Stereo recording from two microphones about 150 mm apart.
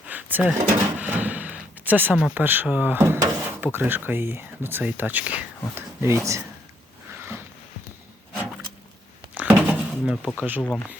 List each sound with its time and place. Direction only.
0.1 s drawer open or close: 10° right (ahead or behind)
2.2 s speech: 10° right (ahead or behind)
9.3 s a sound: 10° right (ahead or behind)